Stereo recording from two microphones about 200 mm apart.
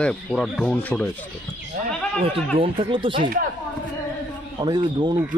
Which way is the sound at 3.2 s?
40° right (ahead or behind).